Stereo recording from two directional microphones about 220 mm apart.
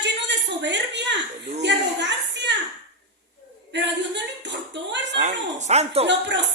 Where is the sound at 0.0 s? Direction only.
55° right (ahead or behind).